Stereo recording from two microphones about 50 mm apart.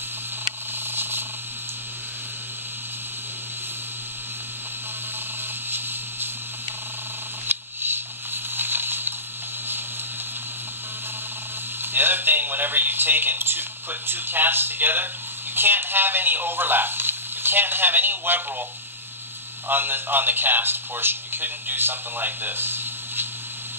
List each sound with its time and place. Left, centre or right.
7.4 s a sound: right
11.8 s speech: right
19.7 s a man's voice: right